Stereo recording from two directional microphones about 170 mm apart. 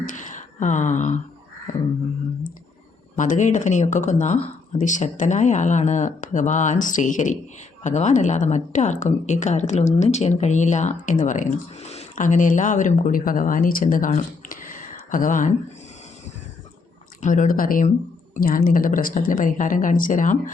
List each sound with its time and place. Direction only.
0.0 s a sound: 50° left (ahead or behind)
3.2 s a woman's voice: 45° left (ahead or behind)
17.2 s a woman's voice: 50° left (ahead or behind)